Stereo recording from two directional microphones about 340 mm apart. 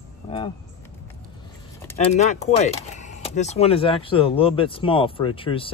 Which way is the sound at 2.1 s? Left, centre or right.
Centre.